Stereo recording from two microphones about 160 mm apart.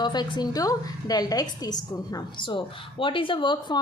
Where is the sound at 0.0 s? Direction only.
25° left (ahead or behind).